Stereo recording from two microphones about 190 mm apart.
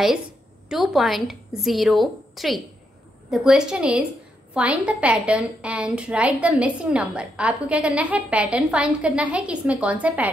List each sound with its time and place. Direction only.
0.7 s a woman's voice: centre (ahead or behind)